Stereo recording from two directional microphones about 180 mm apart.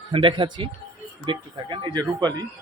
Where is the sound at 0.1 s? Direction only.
25° right (ahead or behind).